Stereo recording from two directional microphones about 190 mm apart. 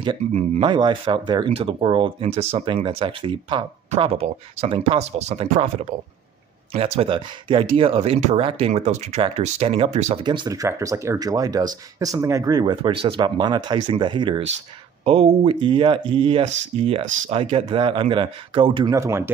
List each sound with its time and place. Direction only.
0.0 s speech: 30° right (ahead or behind)
6.7 s speech: 30° right (ahead or behind)
10.2 s speech: 25° right (ahead or behind)
18.9 s speech: 15° right (ahead or behind)